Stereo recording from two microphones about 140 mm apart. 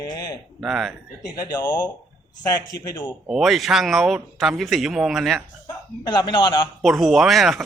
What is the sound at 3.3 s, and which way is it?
Speech, centre (ahead or behind).